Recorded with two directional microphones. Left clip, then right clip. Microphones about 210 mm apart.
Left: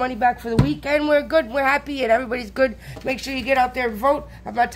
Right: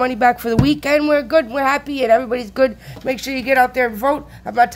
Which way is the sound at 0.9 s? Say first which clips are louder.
Right 2 dB; 20° right (ahead or behind).